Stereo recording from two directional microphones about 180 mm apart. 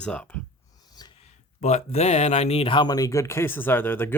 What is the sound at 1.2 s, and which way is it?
Speech, 40° left (ahead or behind).